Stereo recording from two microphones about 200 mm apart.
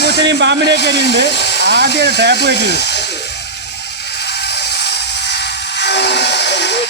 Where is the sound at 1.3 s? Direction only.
60° left (ahead or behind).